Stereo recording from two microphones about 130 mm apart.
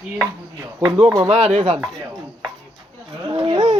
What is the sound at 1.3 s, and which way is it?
Speech, 55° right (ahead or behind).